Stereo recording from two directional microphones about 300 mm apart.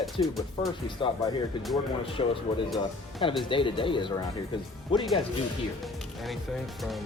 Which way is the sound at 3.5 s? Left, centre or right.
Centre.